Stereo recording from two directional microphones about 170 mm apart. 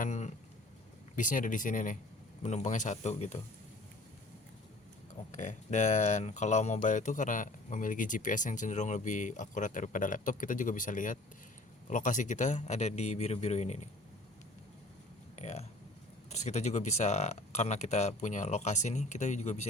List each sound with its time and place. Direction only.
0.0 s a sound: 45° left (ahead or behind)
1.1 s speech: 50° left (ahead or behind)
5.4 s a man's voice: 45° left (ahead or behind)
15.4 s speech: 40° left (ahead or behind)